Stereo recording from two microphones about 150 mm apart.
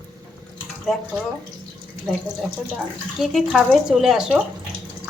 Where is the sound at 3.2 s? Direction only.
Centre (ahead or behind).